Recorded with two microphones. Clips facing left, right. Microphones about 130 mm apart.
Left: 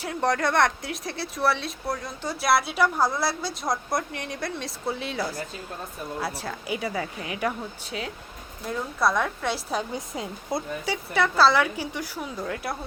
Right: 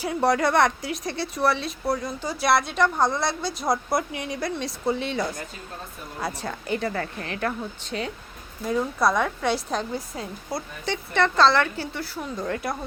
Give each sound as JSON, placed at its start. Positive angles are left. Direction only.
{"t": 0.0, "sound": "speech", "side_deg": -5}
{"t": 9.9, "sound": "speech", "side_deg": 20}
{"t": 10.8, "sound": "speech", "side_deg": 5}